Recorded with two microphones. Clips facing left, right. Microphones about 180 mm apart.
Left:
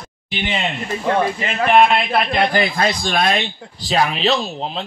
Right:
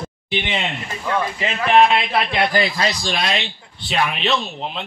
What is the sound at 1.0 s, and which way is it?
A man's voice, 45° left (ahead or behind).